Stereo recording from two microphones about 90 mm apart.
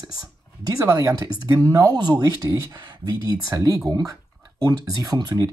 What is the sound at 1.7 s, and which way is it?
Speech, 45° right (ahead or behind).